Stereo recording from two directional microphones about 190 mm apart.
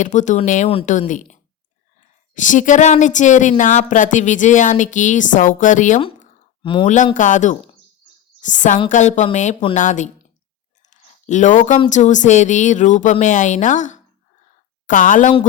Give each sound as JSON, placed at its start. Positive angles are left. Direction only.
{"t": 0.0, "sound": "speech", "side_deg": 40}
{"t": 6.6, "sound": "speech", "side_deg": 25}
{"t": 6.8, "sound": "a woman's voice", "side_deg": 40}
{"t": 10.8, "sound": "a sound", "side_deg": 40}
{"t": 11.9, "sound": "a woman's voice", "side_deg": 40}